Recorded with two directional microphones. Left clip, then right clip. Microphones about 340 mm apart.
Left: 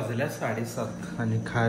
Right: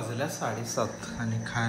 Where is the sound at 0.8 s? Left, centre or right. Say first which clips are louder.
Right 3 dB; centre.